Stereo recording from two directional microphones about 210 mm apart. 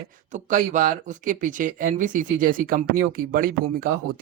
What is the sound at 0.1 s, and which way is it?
Speech, 35° right (ahead or behind).